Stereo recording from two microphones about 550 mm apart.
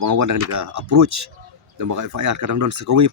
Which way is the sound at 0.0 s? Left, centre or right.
Right.